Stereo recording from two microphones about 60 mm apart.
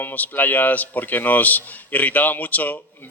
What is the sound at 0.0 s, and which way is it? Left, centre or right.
Speech, left.